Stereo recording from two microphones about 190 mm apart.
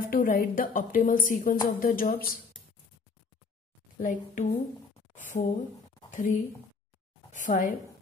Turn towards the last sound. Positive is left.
turn(degrees=45)  # may be behind; listen again after turning